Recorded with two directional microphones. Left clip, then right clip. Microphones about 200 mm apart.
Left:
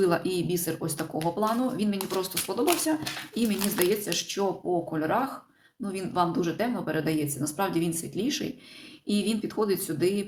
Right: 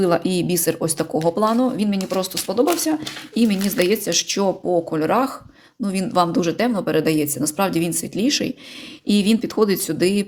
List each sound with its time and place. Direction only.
0.0 s speech: 40° right (ahead or behind)